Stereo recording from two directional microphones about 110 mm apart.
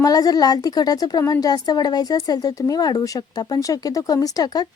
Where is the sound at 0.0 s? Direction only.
35° left (ahead or behind).